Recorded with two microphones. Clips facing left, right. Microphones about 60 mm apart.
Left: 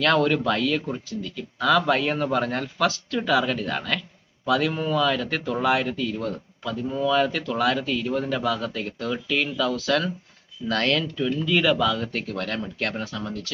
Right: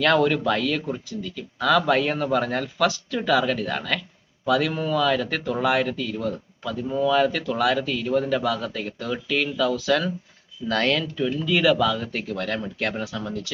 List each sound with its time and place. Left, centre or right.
0.0 s a man's voice: centre
4.7 s speech: centre
4.9 s speech: centre